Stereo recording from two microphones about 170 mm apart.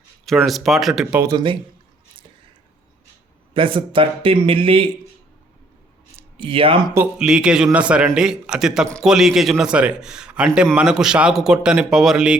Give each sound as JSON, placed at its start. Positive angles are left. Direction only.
{"t": 0.3, "sound": "a man's voice", "side_deg": 0}
{"t": 1.2, "sound": "speech", "side_deg": -25}
{"t": 3.5, "sound": "a man's voice", "side_deg": -30}
{"t": 6.1, "sound": "speech", "side_deg": -30}
{"t": 6.9, "sound": "a man's voice", "side_deg": -5}